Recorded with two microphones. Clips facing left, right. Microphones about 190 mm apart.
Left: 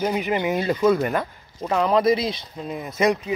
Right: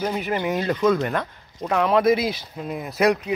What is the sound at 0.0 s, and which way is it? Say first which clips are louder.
Speech: left 2 dB; 10° left (ahead or behind).